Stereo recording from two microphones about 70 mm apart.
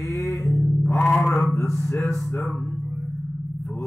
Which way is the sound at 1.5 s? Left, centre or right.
Left.